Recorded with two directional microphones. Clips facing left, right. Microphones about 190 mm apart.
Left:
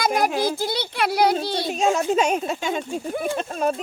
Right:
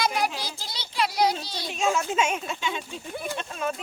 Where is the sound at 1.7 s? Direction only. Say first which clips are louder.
Left 4 dB; 40° left (ahead or behind).